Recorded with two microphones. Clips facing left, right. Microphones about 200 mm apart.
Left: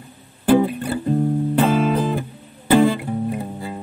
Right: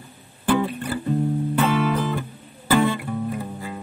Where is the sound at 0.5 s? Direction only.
30° left (ahead or behind).